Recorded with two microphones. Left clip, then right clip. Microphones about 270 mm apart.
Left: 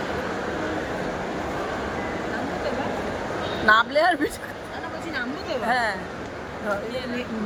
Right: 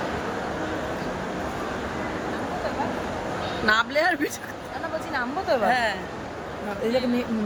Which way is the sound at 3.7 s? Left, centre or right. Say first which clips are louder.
Left 4 dB; centre.